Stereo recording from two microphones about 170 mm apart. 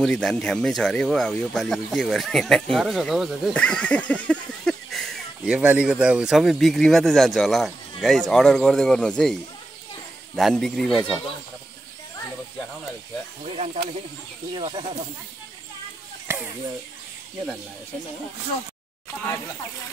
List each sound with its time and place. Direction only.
0.0 s speech: 5° left (ahead or behind)
14.5 s speech: 30° right (ahead or behind)